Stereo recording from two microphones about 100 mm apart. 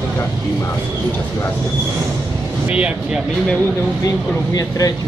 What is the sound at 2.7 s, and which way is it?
Speech, 10° right (ahead or behind).